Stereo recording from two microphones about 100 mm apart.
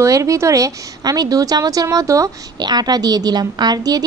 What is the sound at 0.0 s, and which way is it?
A woman's voice, 30° right (ahead or behind).